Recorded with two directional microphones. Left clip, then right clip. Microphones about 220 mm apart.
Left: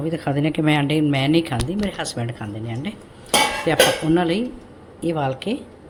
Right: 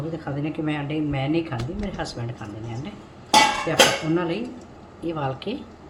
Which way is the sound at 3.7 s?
45° left (ahead or behind).